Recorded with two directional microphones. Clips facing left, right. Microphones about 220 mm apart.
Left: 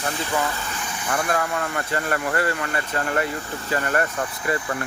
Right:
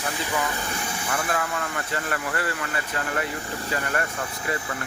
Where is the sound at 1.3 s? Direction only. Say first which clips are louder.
Left 4 dB; 45° left (ahead or behind).